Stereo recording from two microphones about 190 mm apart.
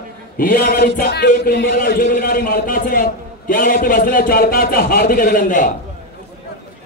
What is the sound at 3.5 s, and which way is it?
A man's voice, 45° left (ahead or behind).